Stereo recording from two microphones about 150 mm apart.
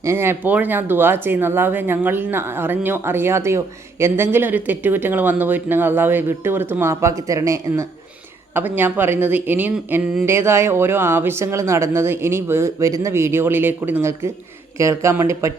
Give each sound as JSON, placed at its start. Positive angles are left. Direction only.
{"t": 0.0, "sound": "speech", "side_deg": -15}